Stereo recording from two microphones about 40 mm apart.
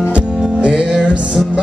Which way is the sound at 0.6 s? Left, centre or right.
Right.